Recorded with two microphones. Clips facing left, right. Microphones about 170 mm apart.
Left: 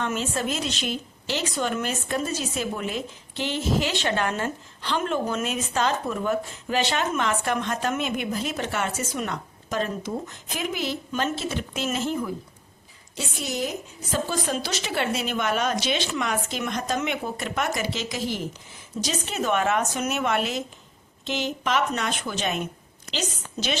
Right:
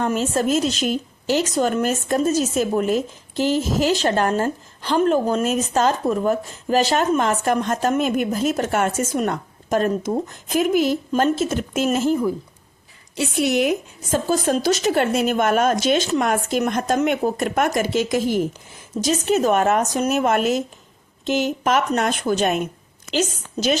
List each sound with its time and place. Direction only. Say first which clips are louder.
0.0 s a woman's voice: right 7 dB; 40° right (ahead or behind)
13.1 s a woman's voice: right 10 dB; 65° right (ahead or behind)
14.1 s a woman's voice: right 7 dB; 45° right (ahead or behind)